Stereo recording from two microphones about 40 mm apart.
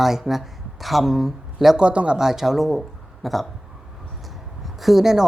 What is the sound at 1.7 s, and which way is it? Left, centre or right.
Speech, right.